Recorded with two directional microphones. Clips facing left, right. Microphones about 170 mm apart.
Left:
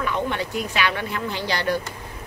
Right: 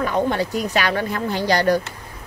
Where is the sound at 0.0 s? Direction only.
40° right (ahead or behind).